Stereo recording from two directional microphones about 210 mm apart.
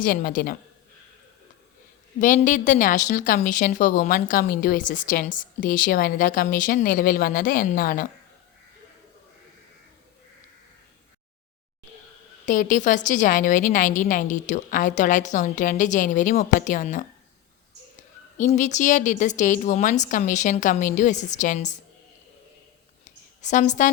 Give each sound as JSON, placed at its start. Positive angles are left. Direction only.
{"t": 0.0, "sound": "a woman's voice", "side_deg": 45}
{"t": 2.1, "sound": "a woman's voice", "side_deg": 40}
{"t": 12.5, "sound": "a woman's voice", "side_deg": 35}
{"t": 18.3, "sound": "a woman's voice", "side_deg": 35}
{"t": 23.0, "sound": "a sound", "side_deg": 35}